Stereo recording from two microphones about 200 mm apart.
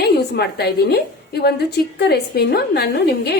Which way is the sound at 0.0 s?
55° left (ahead or behind).